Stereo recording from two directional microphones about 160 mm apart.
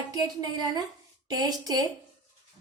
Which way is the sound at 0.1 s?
25° right (ahead or behind).